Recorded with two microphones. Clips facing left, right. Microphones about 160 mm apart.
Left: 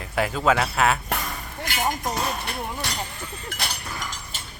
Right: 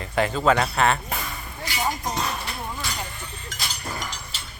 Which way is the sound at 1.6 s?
55° left (ahead or behind).